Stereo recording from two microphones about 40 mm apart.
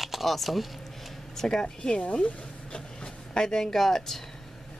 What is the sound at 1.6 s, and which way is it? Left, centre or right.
Speech, left.